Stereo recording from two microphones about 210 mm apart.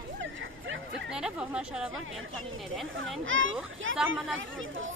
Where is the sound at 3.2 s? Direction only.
65° right (ahead or behind).